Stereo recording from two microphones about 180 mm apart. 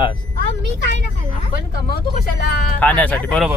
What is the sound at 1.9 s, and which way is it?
Speech, 60° left (ahead or behind).